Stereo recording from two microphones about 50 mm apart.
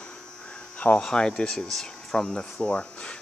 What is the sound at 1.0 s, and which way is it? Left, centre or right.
Speech, centre.